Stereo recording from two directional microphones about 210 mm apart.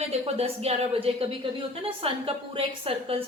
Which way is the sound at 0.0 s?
30° right (ahead or behind).